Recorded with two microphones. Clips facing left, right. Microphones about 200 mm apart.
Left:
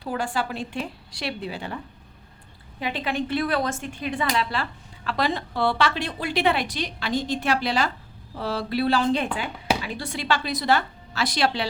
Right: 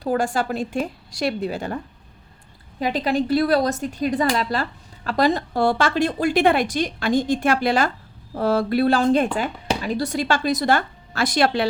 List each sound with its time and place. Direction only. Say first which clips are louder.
0.0 s a woman's voice: right 6 dB; 45° right (ahead or behind)
2.8 s a woman's voice: right 6 dB; 40° right (ahead or behind)